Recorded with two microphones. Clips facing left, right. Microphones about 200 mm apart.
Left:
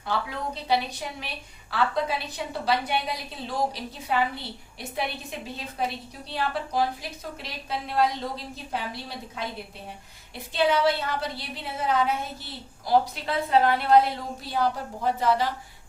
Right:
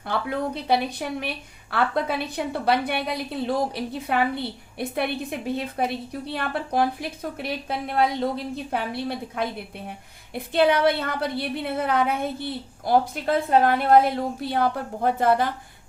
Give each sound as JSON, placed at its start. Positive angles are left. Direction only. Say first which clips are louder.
{"t": 0.0, "sound": "a woman's voice", "louder": "right 4 dB", "side_deg": -55}